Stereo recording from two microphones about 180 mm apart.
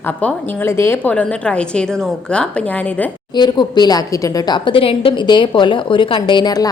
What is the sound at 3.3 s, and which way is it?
A woman's voice, 25° left (ahead or behind).